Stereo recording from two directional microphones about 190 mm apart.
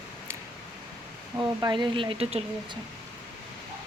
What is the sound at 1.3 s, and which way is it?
Speech, 20° right (ahead or behind).